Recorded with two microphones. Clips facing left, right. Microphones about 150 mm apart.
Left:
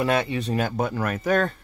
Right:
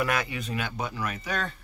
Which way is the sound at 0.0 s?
25° left (ahead or behind).